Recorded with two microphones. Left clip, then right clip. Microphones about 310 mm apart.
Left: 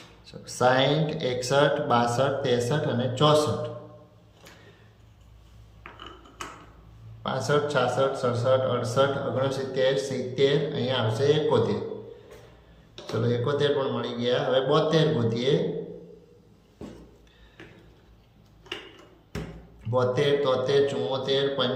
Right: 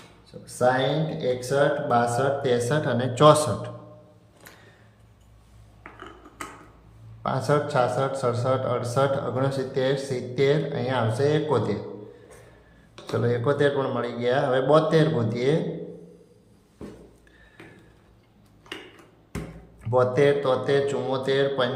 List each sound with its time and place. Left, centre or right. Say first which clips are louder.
0.4 s speech: even; centre
7.2 s speech: right 1 dB; centre
13.2 s speech: right 2 dB; centre
19.9 s speech: right 3 dB; centre